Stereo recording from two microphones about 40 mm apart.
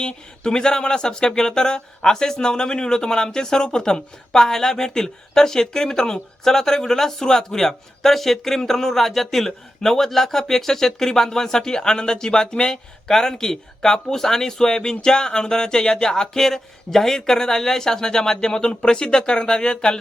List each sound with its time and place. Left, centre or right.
0.0 s speech: left